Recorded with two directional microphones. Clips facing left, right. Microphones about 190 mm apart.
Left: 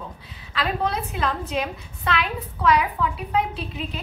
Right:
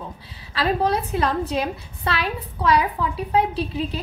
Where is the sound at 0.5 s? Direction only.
35° right (ahead or behind).